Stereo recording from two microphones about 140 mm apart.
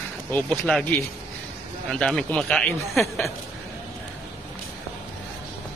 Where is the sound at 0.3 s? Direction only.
10° left (ahead or behind).